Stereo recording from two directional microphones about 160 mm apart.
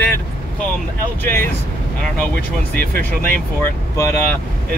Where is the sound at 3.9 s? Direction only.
15° left (ahead or behind).